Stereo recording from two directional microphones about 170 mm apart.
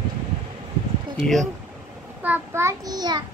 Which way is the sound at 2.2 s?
10° right (ahead or behind).